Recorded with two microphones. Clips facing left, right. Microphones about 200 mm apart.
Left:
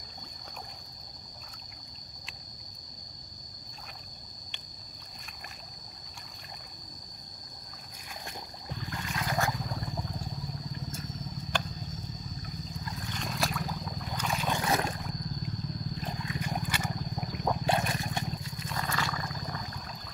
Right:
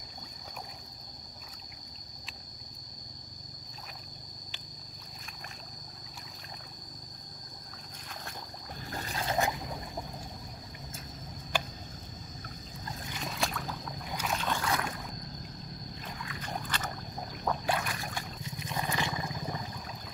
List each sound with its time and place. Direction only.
8.8 s boat: 35° right (ahead or behind); by 9.6 s 20° right (ahead or behind)
11.5 s a sound: 5° right (ahead or behind)
13.1 s boat: centre (ahead or behind)
14.6 s boat: 25° left (ahead or behind)
16.0 s a sound: 25° left (ahead or behind)
16.3 s wild animals: 10° left (ahead or behind)
17.6 s trickle: 25° left (ahead or behind)
18.4 s wild animals: 15° right (ahead or behind)